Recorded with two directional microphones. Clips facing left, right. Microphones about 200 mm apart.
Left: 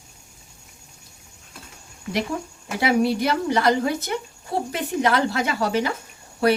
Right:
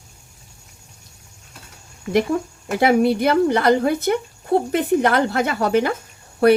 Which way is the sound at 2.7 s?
50° right (ahead or behind).